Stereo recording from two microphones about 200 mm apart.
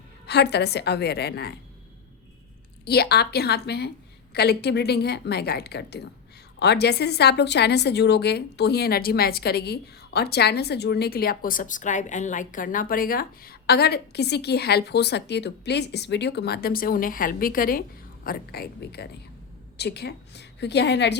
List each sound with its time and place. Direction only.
0.3 s a woman's voice: 55° left (ahead or behind)
2.8 s a woman's voice: 55° left (ahead or behind)